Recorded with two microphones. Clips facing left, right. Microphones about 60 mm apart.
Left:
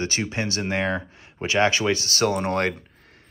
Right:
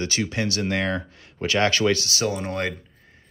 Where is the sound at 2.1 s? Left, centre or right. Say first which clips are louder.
Left 3 dB; left.